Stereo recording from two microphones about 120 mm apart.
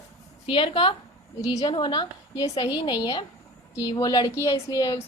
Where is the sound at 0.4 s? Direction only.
45° left (ahead or behind).